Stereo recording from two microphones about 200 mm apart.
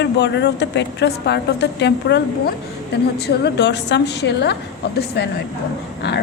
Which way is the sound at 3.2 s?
55° left (ahead or behind).